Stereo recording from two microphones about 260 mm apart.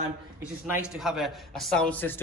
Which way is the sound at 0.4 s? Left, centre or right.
Centre.